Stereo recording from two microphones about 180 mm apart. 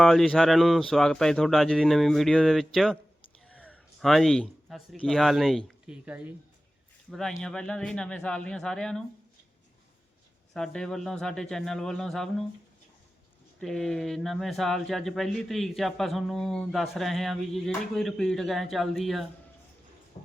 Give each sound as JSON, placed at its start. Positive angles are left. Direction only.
{"t": 0.0, "sound": "speech", "side_deg": 0}
{"t": 7.1, "sound": "speech", "side_deg": 5}
{"t": 10.5, "sound": "speech", "side_deg": 5}
{"t": 13.6, "sound": "speech", "side_deg": 0}
{"t": 20.1, "sound": "a sound", "side_deg": 35}